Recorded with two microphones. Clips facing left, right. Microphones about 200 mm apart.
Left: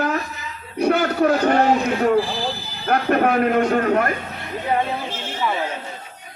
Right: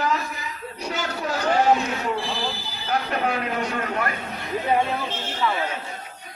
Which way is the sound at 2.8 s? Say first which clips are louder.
Left 7 dB; 55° left (ahead or behind).